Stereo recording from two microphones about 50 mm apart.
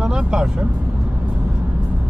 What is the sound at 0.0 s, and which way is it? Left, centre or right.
Vehicle, centre.